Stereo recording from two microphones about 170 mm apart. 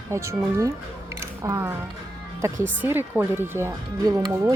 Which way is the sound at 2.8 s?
10° right (ahead or behind).